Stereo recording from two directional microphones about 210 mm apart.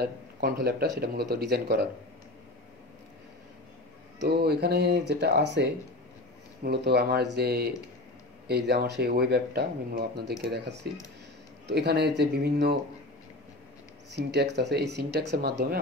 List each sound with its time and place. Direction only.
0.0 s speech: 50° right (ahead or behind)
4.2 s speech: 50° right (ahead or behind)
14.1 s speech: 55° right (ahead or behind)